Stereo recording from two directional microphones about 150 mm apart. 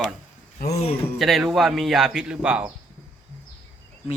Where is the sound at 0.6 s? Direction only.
90° left.